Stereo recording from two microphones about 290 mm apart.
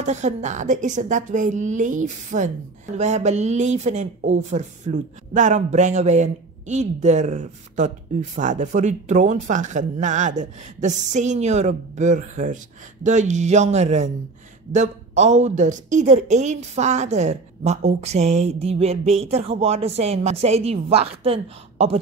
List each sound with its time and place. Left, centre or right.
0.0 s a woman's voice: right